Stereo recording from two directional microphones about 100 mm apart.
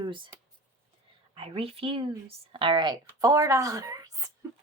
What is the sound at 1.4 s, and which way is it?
Speech, 70° right (ahead or behind).